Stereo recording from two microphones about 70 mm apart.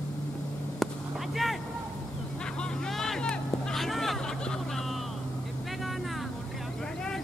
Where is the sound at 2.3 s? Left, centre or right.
Centre.